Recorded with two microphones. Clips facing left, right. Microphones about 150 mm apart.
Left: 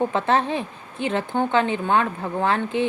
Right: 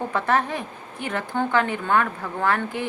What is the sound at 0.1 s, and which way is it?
Speech, 25° left (ahead or behind).